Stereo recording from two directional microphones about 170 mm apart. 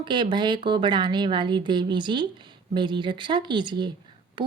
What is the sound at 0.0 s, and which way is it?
Speech, 25° right (ahead or behind).